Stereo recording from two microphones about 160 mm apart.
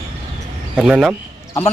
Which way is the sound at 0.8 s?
Centre (ahead or behind).